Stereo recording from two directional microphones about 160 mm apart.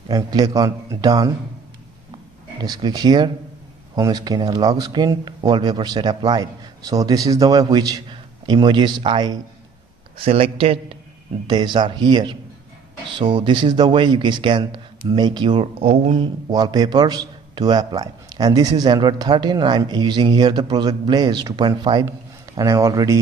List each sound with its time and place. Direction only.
0.1 s a man's voice: 25° right (ahead or behind)
2.6 s a man's voice: 25° right (ahead or behind); by 16.3 s 40° right (ahead or behind)
16.4 s a man's voice: 25° right (ahead or behind)